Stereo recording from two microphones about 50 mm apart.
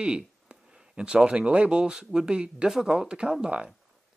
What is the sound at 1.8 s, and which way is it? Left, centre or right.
Speech, centre.